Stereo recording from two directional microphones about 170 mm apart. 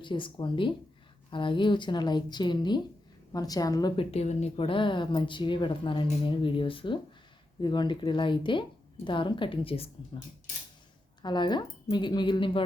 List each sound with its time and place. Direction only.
0.0 s speech: 30° left (ahead or behind)
4.1 s speech: 40° left (ahead or behind)
11.2 s speech: 25° left (ahead or behind)